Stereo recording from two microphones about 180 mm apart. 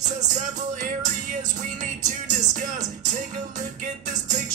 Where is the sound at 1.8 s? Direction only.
45° right (ahead or behind).